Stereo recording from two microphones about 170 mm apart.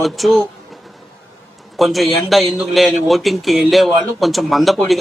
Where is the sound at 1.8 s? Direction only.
Centre (ahead or behind).